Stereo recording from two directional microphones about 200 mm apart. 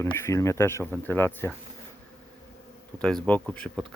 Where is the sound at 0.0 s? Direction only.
15° left (ahead or behind).